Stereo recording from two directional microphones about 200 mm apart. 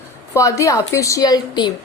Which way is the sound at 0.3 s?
15° left (ahead or behind).